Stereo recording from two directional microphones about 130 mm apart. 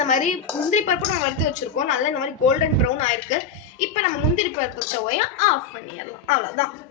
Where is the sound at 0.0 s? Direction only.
70° left (ahead or behind).